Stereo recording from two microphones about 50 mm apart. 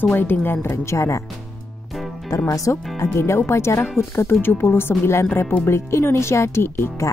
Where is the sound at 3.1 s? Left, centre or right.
Left.